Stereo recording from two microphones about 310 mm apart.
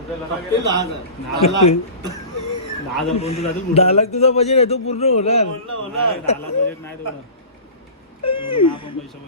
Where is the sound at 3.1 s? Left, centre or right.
Centre.